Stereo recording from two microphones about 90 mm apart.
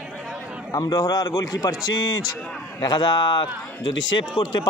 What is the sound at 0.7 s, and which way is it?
A man's voice, 40° left (ahead or behind).